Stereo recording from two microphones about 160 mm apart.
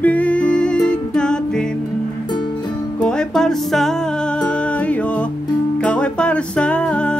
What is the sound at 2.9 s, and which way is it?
Music, 5° left (ahead or behind).